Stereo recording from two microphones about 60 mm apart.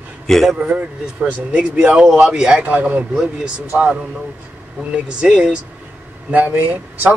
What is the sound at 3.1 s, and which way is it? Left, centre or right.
Speech, centre.